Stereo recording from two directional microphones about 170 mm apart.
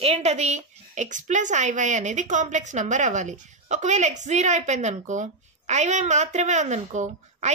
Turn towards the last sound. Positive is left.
turn(degrees=-45)  # may be behind; listen again after turning